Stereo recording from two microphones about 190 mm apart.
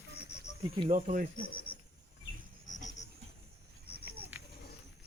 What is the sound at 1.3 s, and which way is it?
Speech, 50° left (ahead or behind).